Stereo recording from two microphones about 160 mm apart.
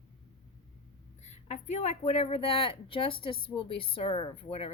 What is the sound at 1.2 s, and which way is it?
Speech, 45° left (ahead or behind).